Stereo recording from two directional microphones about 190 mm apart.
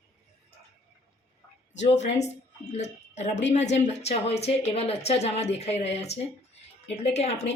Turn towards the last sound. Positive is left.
turn(degrees=35)  # may be behind; listen again after turning